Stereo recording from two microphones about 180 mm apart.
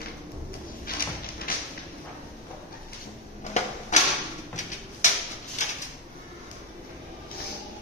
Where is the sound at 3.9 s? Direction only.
45° left (ahead or behind).